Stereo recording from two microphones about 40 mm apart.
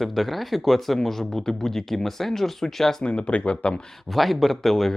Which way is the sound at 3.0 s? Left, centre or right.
Left.